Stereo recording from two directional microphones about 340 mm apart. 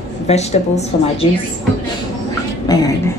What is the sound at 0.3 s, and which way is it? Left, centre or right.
Speech, centre.